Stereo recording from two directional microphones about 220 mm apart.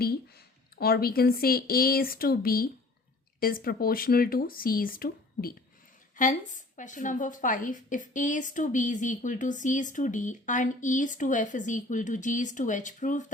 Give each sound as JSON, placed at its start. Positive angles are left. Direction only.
{"t": 0.8, "sound": "a woman's voice", "side_deg": 45}